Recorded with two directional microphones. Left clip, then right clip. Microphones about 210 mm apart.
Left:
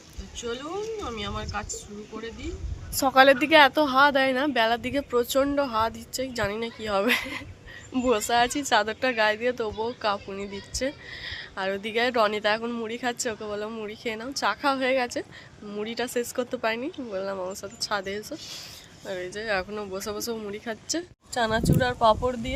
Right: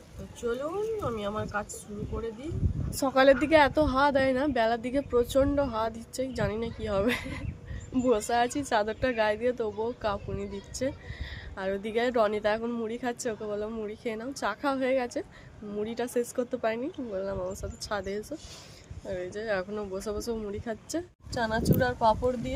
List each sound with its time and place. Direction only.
0.4 s speech: centre (ahead or behind)
21.3 s speech: 15° left (ahead or behind)